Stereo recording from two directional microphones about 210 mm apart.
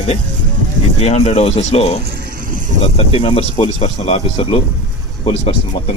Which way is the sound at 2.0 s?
45° right (ahead or behind).